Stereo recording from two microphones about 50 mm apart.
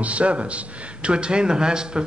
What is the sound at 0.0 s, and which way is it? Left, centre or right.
Speech, right.